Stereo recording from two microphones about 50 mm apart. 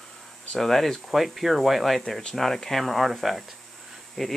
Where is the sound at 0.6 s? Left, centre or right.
Centre.